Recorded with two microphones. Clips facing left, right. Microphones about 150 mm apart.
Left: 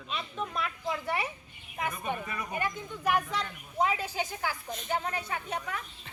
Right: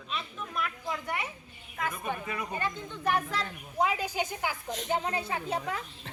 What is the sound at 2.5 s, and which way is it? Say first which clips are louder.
Speech: left 4 dB; 15° left (ahead or behind).